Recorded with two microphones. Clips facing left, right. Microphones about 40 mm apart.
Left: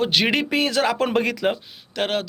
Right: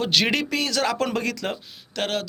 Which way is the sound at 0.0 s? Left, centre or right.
Centre.